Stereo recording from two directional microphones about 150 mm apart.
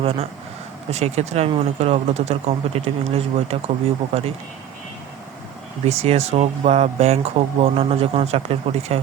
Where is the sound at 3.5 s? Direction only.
45° right (ahead or behind).